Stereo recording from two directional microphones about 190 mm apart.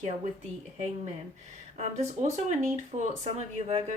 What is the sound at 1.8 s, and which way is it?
Speech, 35° right (ahead or behind).